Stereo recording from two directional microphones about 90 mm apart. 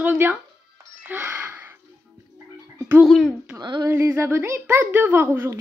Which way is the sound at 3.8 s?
25° right (ahead or behind).